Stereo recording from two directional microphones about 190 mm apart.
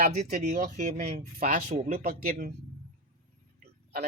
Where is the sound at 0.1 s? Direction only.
40° right (ahead or behind).